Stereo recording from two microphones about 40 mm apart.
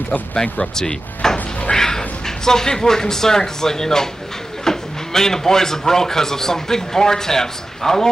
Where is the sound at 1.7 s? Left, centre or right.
Centre.